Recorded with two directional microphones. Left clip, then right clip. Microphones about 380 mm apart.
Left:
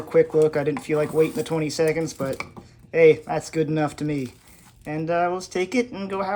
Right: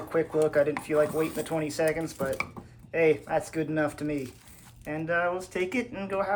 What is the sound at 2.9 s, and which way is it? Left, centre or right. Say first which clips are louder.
Speech: left 8 dB; centre.